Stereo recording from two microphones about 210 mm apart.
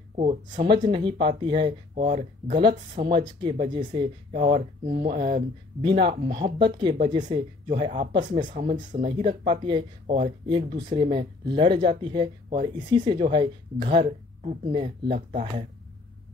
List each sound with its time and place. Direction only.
0.1 s speech: 30° right (ahead or behind)